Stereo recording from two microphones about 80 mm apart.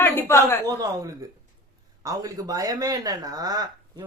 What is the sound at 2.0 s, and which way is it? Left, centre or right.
Speech, right.